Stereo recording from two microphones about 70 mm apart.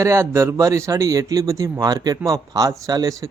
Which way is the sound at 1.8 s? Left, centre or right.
Right.